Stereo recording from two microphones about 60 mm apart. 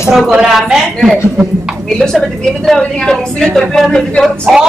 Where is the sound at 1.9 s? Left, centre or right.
Centre.